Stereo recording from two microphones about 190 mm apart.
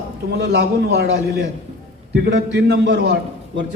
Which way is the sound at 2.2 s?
65° right (ahead or behind).